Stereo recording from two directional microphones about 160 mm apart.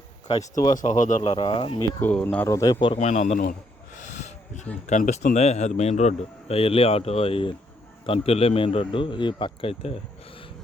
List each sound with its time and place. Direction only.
0.3 s speech: 25° left (ahead or behind)
0.8 s speech: 50° left (ahead or behind)
1.3 s a man's voice: 35° left (ahead or behind)
2.0 s speech: 10° left (ahead or behind)
2.7 s speech: 40° left (ahead or behind)
4.9 s a man's voice: 50° left (ahead or behind)